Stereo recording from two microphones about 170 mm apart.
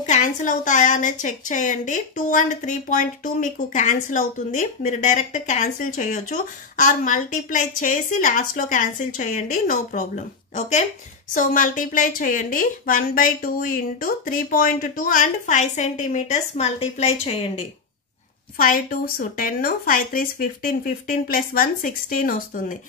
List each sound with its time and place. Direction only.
0.0 s a woman's voice: 45° left (ahead or behind)
18.6 s a woman's voice: 55° left (ahead or behind)